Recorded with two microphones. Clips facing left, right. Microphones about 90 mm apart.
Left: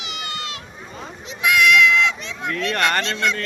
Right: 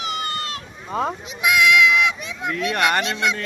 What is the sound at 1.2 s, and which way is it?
Speech, 15° right (ahead or behind).